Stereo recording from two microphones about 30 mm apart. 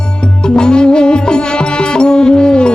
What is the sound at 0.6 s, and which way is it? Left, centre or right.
Music, left.